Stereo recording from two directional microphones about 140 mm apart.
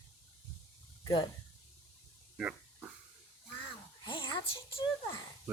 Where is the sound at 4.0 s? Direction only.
35° left (ahead or behind).